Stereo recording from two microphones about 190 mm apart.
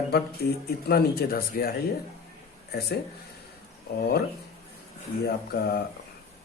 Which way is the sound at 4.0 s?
55° left (ahead or behind).